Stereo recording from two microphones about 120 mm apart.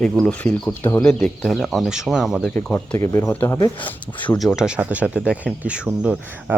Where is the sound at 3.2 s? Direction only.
15° left (ahead or behind).